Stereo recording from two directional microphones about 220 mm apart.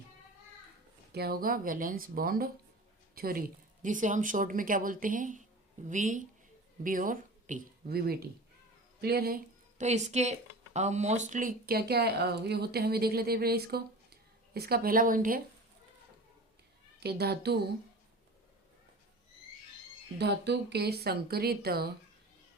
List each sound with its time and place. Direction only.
1.1 s a woman's voice: 45° right (ahead or behind)
17.0 s speech: 45° right (ahead or behind)
20.1 s speech: 50° right (ahead or behind)